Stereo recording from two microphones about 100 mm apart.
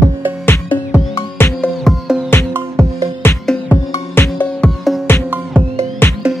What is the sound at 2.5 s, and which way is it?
Music, 25° right (ahead or behind).